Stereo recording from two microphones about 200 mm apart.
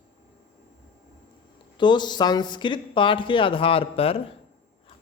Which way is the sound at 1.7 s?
20° left (ahead or behind).